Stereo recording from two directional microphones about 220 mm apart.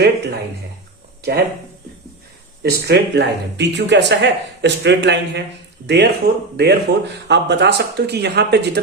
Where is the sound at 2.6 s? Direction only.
50° right (ahead or behind).